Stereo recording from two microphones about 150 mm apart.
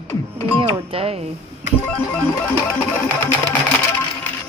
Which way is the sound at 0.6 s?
40° right (ahead or behind).